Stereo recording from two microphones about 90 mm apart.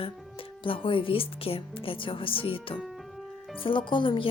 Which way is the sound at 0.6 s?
75° left (ahead or behind).